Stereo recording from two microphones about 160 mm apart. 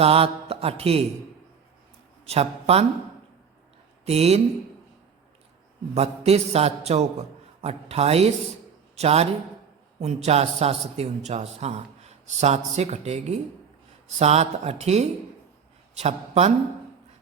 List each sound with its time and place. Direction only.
0.0 s mantra: 40° right (ahead or behind)
2.2 s a man's voice: 40° right (ahead or behind)
4.0 s a man's voice: 40° right (ahead or behind)
5.9 s a man's voice: 40° right (ahead or behind)